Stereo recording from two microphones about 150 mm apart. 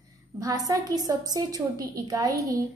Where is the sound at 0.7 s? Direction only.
25° right (ahead or behind).